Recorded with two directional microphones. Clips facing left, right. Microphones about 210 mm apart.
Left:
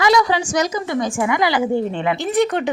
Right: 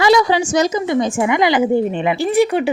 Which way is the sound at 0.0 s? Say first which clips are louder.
Right 3 dB; 30° right (ahead or behind).